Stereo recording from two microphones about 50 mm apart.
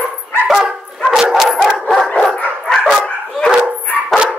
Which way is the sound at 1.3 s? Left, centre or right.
Centre.